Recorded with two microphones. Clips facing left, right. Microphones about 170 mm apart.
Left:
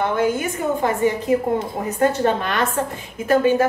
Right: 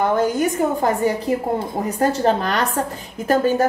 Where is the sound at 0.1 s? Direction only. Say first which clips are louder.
Right 2 dB; 40° right (ahead or behind).